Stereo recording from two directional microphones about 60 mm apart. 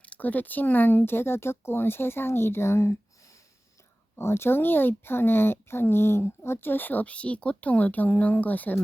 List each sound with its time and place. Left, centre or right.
0.0 s speech: left
4.2 s speech: left